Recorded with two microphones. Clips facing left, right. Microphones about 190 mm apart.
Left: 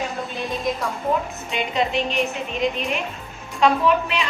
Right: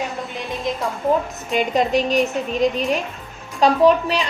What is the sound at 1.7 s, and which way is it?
A woman's voice, 40° right (ahead or behind).